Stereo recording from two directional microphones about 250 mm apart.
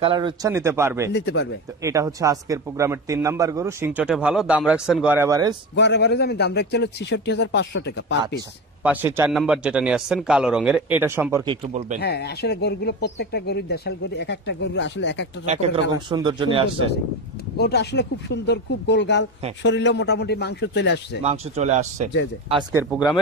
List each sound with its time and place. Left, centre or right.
0.0 s a man's voice: centre
1.1 s a man's voice: left
1.8 s a man's voice: centre
5.8 s a man's voice: left
8.8 s speech: centre
11.6 s speech: right
12.0 s speech: left
15.4 s a man's voice: right
17.6 s a man's voice: left
21.2 s speech: right
22.5 s a man's voice: centre
22.8 s speech: centre